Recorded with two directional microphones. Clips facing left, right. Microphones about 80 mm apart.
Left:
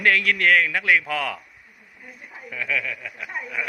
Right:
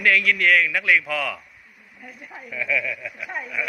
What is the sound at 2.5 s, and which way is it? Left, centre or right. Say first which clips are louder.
Speech: right 2 dB; left.